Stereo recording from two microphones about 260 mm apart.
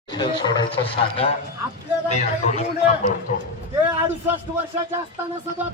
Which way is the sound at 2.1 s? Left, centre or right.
Left.